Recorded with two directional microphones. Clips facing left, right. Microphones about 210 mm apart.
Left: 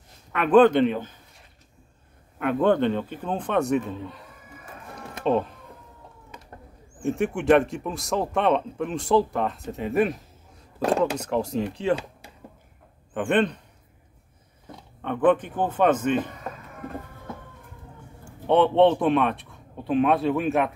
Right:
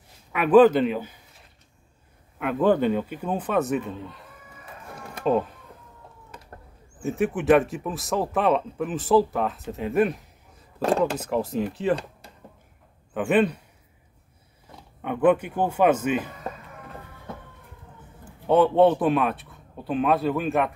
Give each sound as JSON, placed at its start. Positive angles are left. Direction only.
{"t": 0.3, "sound": "a man's voice", "side_deg": -5}
{"t": 2.3, "sound": "speech", "side_deg": -5}
{"t": 4.9, "sound": "music", "side_deg": -5}
{"t": 7.0, "sound": "speech", "side_deg": 0}
{"t": 13.1, "sound": "a man's voice", "side_deg": -5}
{"t": 15.0, "sound": "a man's voice", "side_deg": -10}
{"t": 18.2, "sound": "speech", "side_deg": 0}